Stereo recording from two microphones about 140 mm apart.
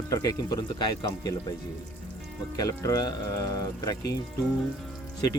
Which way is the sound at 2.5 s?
25° left (ahead or behind).